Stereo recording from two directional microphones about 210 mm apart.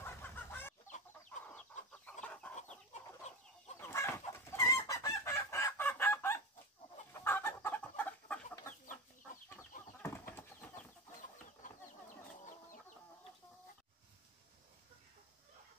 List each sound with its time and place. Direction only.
0.0 s chicken: 10° left (ahead or behind)
2.9 s chicken: 30° left (ahead or behind)
3.8 s chicken: 10° left (ahead or behind)